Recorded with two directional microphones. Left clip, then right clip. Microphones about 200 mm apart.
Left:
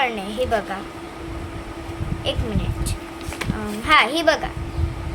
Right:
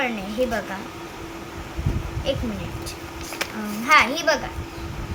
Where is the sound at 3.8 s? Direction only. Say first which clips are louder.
Left 1 dB; 55° left (ahead or behind).